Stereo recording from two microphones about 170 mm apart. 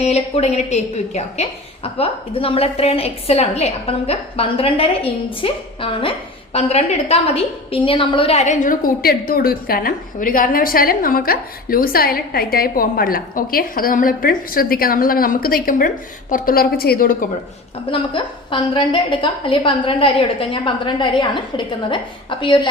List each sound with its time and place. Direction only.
0.0 s a woman's voice: 40° left (ahead or behind); by 17.2 s 55° left (ahead or behind)
17.9 s a woman's voice: 30° left (ahead or behind)